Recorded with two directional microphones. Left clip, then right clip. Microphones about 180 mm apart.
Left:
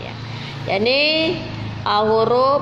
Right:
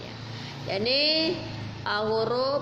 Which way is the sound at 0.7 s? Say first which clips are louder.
Left 8 dB; 25° left (ahead or behind).